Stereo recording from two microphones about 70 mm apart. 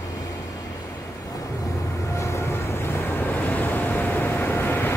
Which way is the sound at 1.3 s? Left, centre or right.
Left.